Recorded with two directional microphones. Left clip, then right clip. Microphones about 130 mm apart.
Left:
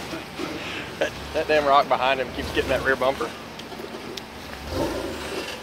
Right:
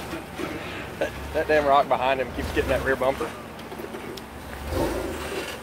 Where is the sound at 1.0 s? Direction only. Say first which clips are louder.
Left 1 dB; 10° right (ahead or behind).